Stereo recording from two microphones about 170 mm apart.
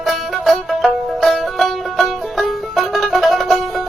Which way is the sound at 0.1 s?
Centre (ahead or behind).